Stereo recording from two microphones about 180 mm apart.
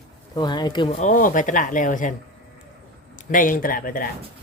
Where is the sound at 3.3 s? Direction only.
50° left (ahead or behind).